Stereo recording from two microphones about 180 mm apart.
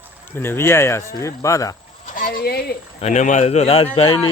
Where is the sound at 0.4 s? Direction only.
15° left (ahead or behind).